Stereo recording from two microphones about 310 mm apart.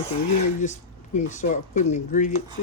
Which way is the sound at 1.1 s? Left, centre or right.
Left.